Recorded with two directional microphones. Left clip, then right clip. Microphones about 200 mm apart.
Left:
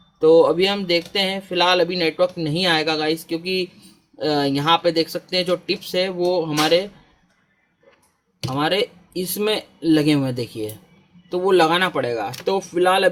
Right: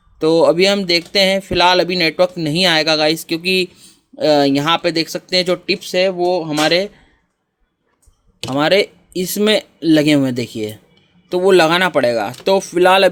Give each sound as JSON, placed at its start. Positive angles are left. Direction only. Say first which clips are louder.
{"t": 0.2, "sound": "speech", "louder": "right 2 dB", "side_deg": -40}
{"t": 8.4, "sound": "speech", "louder": "right 6 dB", "side_deg": -35}